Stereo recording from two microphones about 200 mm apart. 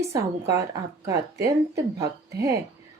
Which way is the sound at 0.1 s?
15° right (ahead or behind).